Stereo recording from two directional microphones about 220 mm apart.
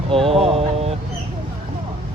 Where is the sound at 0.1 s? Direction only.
25° right (ahead or behind).